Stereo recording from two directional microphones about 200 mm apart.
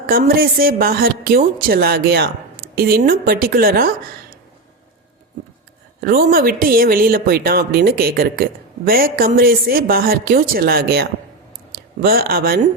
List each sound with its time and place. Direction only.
0.1 s speech: 50° right (ahead or behind)
6.0 s speech: 45° right (ahead or behind)